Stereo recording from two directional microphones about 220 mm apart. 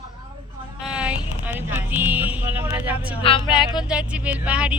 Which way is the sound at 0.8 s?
5° right (ahead or behind).